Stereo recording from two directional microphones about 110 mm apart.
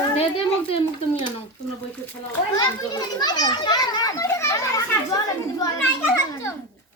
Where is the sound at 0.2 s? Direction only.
60° left (ahead or behind).